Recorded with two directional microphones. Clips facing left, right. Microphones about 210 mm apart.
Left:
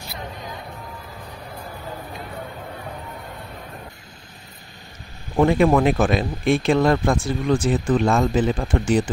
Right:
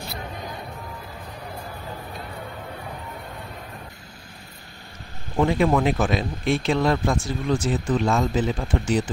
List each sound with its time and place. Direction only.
5.4 s speech: 50° left (ahead or behind)